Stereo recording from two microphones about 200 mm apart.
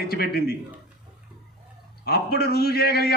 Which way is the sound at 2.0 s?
50° left (ahead or behind).